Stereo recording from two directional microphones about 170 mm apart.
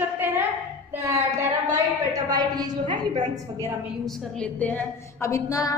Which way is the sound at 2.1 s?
20° right (ahead or behind).